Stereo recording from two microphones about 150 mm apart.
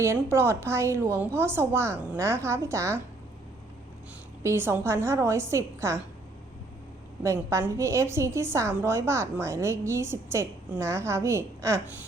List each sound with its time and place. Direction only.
0.0 s a woman's voice: 15° right (ahead or behind)
4.4 s a woman's voice: 15° right (ahead or behind)
7.2 s a woman's voice: 20° right (ahead or behind)